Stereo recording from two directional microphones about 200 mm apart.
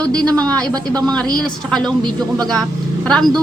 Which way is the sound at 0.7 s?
20° right (ahead or behind).